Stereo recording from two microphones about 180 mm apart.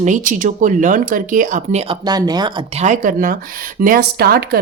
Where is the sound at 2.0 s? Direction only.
20° right (ahead or behind).